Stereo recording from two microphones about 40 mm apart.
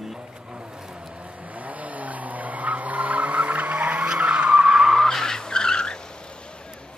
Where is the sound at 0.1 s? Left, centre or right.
Right.